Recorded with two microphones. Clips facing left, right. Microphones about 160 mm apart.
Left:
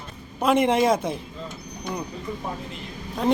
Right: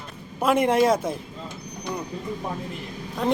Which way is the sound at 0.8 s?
Centre (ahead or behind).